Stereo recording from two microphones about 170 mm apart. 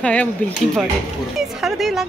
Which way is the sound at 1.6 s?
Centre (ahead or behind).